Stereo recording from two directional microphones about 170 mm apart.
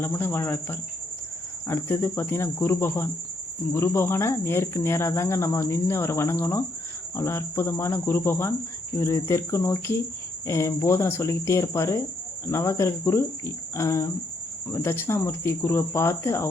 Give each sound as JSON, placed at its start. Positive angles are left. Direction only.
{"t": 0.0, "sound": "speech", "side_deg": 15}